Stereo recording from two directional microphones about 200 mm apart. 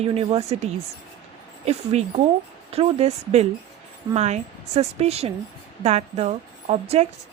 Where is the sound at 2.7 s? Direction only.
30° right (ahead or behind).